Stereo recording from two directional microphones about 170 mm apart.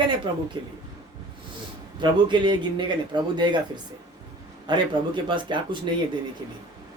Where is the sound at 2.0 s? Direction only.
25° right (ahead or behind).